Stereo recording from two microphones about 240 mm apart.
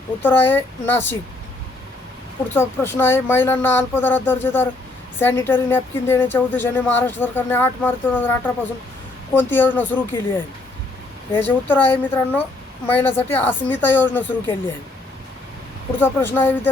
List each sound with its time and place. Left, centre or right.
0.2 s a woman's voice: centre
2.5 s a woman's voice: centre
16.0 s a woman's voice: centre